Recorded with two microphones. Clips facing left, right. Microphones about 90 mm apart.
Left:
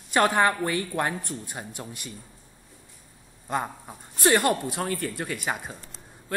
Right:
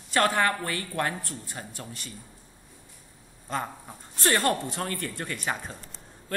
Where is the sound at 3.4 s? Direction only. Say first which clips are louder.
Left 3 dB; 15° left (ahead or behind).